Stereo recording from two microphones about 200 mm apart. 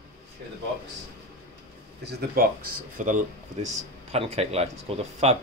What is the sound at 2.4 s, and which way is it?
Speech, 50° right (ahead or behind).